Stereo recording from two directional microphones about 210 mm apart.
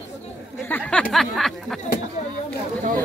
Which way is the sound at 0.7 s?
5° left (ahead or behind).